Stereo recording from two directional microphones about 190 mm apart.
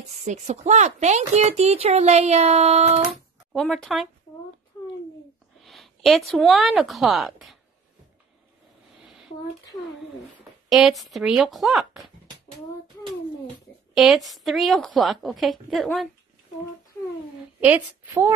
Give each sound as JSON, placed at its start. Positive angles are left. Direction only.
{"t": 0.2, "sound": "speech", "side_deg": -40}
{"t": 3.5, "sound": "a woman's voice", "side_deg": 0}
{"t": 5.6, "sound": "a woman's voice", "side_deg": 0}
{"t": 10.7, "sound": "a woman's voice", "side_deg": 0}
{"t": 13.9, "sound": "a woman's voice", "side_deg": 0}
{"t": 17.6, "sound": "a woman's voice", "side_deg": -10}